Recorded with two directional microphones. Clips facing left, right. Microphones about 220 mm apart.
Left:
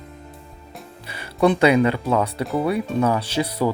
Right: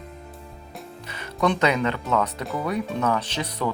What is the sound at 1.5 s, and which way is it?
Speech, 10° left (ahead or behind).